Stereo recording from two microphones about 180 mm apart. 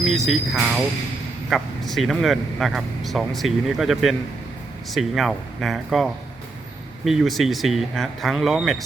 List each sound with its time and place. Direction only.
0.0 s speech: centre (ahead or behind)